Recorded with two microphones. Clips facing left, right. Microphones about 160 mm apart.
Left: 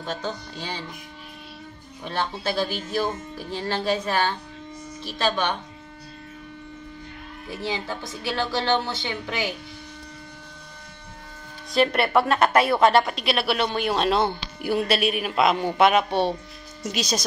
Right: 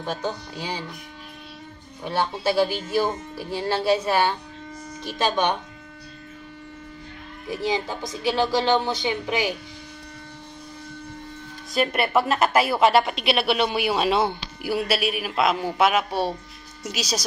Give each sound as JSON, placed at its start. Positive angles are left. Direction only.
{"t": 0.0, "sound": "speech", "side_deg": -10}
{"t": 2.0, "sound": "speech", "side_deg": -10}
{"t": 7.4, "sound": "speech", "side_deg": -15}
{"t": 11.7, "sound": "a woman's voice", "side_deg": 0}